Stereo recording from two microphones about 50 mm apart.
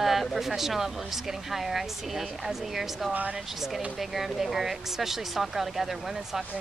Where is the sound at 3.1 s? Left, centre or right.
Right.